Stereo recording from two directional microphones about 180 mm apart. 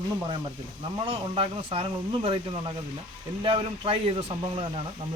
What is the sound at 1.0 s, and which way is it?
Speech, 30° right (ahead or behind).